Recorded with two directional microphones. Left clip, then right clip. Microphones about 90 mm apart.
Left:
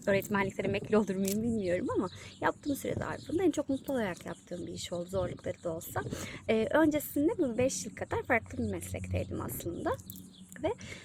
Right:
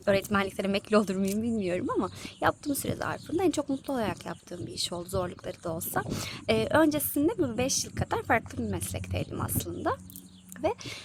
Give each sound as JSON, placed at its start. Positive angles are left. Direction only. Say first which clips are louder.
{"t": 0.0, "sound": "a woman's voice", "louder": "right 4 dB", "side_deg": -35}
{"t": 6.1, "sound": "a woman's voice", "louder": "right 1 dB", "side_deg": -35}